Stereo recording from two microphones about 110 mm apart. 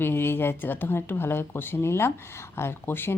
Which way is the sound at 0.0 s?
20° left (ahead or behind).